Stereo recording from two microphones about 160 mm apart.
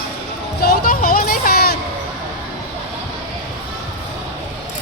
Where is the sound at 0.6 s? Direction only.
60° left (ahead or behind).